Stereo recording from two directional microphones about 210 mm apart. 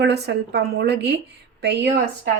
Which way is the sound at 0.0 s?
50° right (ahead or behind).